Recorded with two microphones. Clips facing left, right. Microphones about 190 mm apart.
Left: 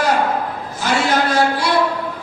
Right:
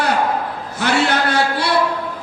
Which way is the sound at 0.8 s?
65° right (ahead or behind).